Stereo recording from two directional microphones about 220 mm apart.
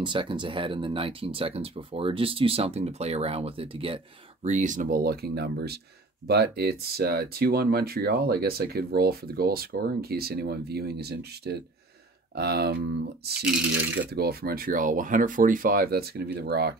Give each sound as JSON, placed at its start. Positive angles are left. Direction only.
{"t": 0.0, "sound": "speech", "side_deg": -20}
{"t": 13.4, "sound": "speech", "side_deg": -5}
{"t": 14.1, "sound": "speech", "side_deg": -45}